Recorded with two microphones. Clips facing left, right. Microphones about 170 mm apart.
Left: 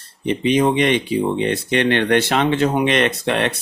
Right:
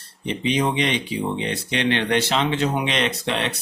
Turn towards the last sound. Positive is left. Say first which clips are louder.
# left 5 dB
turn(degrees=55)  # may be behind; listen again after turning